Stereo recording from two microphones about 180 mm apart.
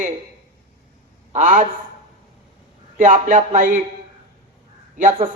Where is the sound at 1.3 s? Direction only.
45° right (ahead or behind).